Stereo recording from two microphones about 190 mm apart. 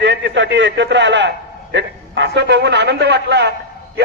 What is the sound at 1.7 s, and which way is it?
A man's voice, 70° right (ahead or behind).